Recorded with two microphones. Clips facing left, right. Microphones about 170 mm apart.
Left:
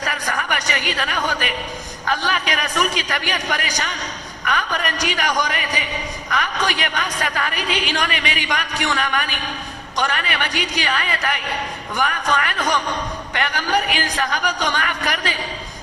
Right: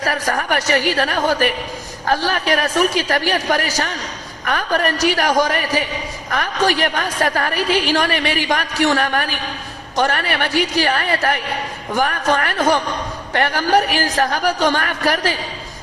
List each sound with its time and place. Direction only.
0.0 s a man's voice: 45° right (ahead or behind)